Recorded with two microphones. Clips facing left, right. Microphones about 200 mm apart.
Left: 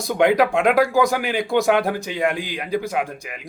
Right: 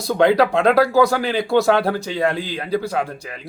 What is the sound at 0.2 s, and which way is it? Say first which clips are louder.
Speech: right 1 dB; 15° left (ahead or behind).